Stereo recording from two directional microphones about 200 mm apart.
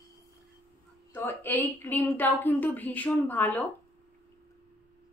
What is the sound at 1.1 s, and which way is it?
A child's voice, 10° left (ahead or behind).